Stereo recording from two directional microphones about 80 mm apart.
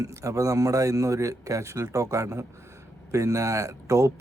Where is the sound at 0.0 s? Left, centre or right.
Right.